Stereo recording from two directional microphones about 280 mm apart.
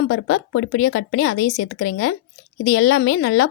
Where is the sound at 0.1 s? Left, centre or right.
Left.